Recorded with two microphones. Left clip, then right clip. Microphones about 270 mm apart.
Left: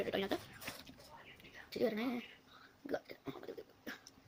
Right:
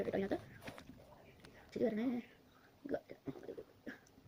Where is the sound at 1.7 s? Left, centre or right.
Left.